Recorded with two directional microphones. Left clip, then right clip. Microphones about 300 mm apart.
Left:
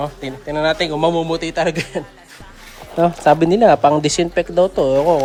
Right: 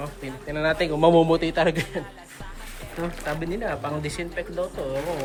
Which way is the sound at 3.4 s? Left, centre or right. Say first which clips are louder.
Left 18 dB; centre.